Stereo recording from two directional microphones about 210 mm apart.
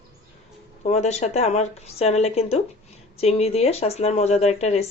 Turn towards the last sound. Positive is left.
turn(degrees=30)  # may be behind; listen again after turning